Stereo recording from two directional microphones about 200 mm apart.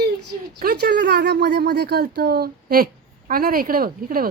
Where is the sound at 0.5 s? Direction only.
50° right (ahead or behind).